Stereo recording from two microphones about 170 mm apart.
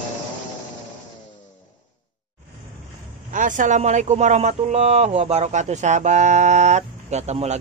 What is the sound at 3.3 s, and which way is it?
Speech, 50° right (ahead or behind).